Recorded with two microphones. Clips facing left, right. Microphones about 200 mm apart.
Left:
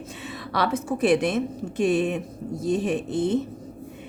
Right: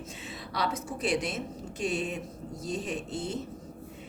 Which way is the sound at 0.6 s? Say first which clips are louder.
Left 8 dB; 55° left (ahead or behind).